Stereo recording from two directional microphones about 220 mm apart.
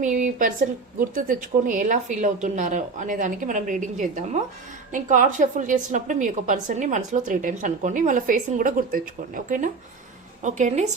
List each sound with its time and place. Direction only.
0.0 s a woman's voice: 35° right (ahead or behind)